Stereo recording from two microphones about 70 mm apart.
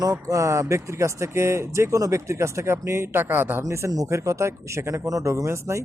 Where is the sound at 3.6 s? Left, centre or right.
Right.